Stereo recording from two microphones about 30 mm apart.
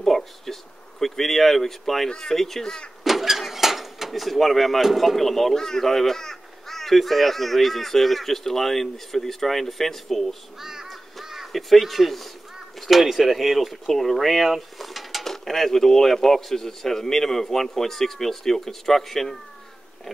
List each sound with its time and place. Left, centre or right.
0.0 s speech: centre
2.0 s speech: centre
3.0 s a sound: centre
4.9 s speech: centre
10.6 s crow: centre
11.5 s speech: centre
15.2 s speech: centre